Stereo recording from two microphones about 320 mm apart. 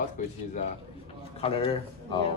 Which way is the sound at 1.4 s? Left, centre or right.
Centre.